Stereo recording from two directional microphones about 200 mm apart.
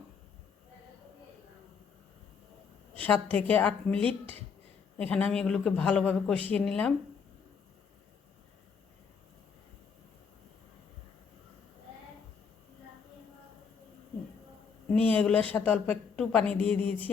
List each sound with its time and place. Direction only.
3.0 s a woman's voice: 10° left (ahead or behind)
4.0 s speech: 30° right (ahead or behind)
4.9 s a man's voice: 5° left (ahead or behind)
14.9 s a woman's voice: 5° left (ahead or behind)